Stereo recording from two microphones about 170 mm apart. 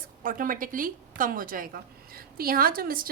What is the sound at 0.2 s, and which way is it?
A woman's voice, 55° right (ahead or behind).